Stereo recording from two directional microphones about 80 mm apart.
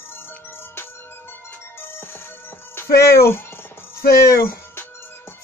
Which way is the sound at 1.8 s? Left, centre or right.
Left.